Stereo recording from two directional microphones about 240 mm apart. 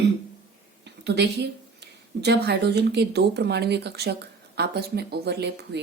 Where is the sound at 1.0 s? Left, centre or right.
Right.